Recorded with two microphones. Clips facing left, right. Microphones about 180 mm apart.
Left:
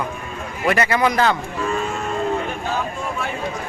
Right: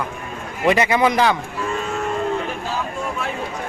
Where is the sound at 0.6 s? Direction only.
15° right (ahead or behind).